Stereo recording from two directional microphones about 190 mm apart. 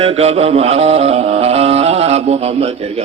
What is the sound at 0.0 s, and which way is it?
A man's voice, 30° right (ahead or behind).